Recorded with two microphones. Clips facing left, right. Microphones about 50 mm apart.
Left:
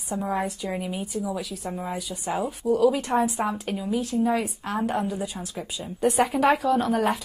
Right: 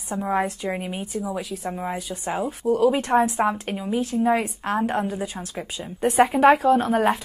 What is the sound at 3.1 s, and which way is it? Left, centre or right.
A woman's voice, centre.